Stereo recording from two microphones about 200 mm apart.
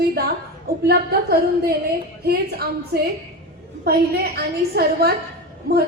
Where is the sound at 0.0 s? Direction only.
50° right (ahead or behind).